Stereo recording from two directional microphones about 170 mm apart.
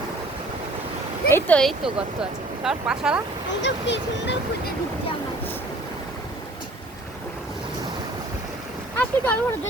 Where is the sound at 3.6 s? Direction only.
90° left.